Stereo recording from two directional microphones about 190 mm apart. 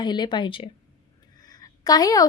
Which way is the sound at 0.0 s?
25° left (ahead or behind).